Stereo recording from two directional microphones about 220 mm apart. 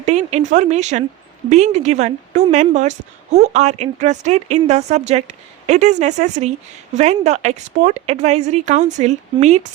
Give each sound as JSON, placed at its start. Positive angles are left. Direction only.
{"t": 0.0, "sound": "speech", "side_deg": -30}